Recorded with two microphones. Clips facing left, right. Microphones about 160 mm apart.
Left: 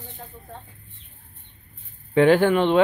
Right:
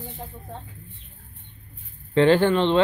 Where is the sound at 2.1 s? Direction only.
10° left (ahead or behind).